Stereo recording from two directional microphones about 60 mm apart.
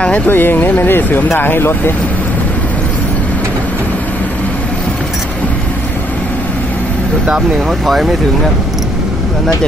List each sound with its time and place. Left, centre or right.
0.3 s speech: left
7.8 s speech: centre